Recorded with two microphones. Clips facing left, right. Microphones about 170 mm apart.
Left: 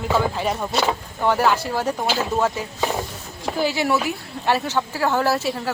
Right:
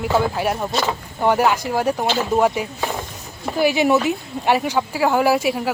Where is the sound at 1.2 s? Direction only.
15° right (ahead or behind).